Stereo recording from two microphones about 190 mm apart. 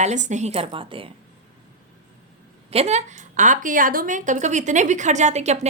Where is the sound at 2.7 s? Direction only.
35° right (ahead or behind).